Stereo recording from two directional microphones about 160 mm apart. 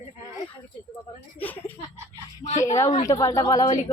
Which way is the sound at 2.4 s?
45° left (ahead or behind).